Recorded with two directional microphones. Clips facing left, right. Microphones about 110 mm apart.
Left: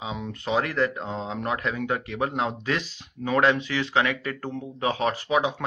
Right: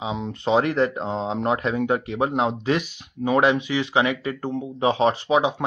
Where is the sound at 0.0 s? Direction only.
20° right (ahead or behind).